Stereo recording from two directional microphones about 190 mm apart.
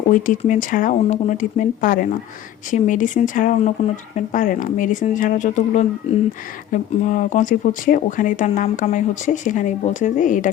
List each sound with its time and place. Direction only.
0.1 s speech: 45° left (ahead or behind)